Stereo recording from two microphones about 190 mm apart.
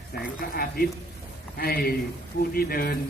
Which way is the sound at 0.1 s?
55° left (ahead or behind).